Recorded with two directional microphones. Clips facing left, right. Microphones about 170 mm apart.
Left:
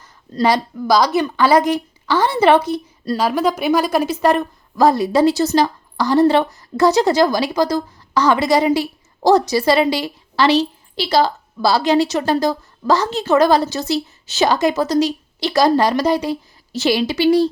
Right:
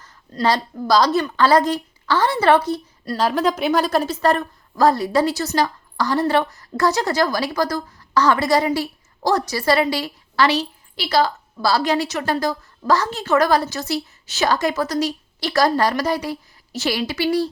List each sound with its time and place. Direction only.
0.4 s a woman's voice: 15° left (ahead or behind)
3.2 s a woman's voice: 5° left (ahead or behind); by 17.2 s 25° left (ahead or behind)